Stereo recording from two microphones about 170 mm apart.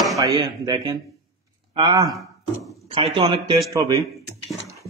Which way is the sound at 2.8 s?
35° right (ahead or behind).